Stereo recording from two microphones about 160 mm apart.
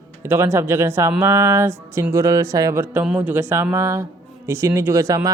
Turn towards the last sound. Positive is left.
turn(degrees=-20)  # may be behind; listen again after turning